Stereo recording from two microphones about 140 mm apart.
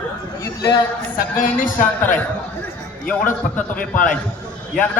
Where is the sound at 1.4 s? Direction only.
70° left (ahead or behind).